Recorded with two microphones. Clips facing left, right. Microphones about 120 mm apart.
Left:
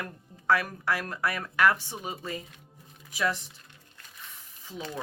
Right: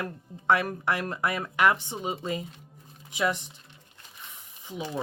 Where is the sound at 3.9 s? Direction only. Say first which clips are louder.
Right 1 dB; 20° right (ahead or behind).